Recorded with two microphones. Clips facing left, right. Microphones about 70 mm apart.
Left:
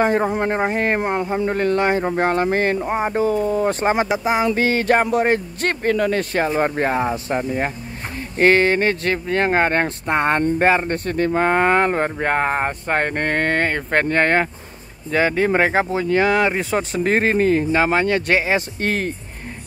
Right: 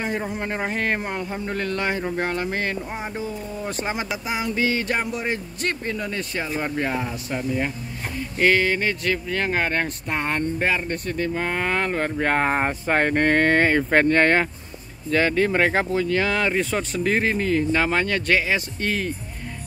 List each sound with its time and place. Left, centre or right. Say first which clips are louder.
0.0 s speech: left 9 dB; left
3.3 s speech: left 12 dB; left
5.9 s speech: left 9 dB; left
6.6 s speech: left 6 dB; left
12.2 s speech: right 2 dB; centre
12.4 s speech: left 1 dB; centre; by 17.1 s left
17.1 s speech: left 5 dB; left
18.8 s speech: left 3 dB; left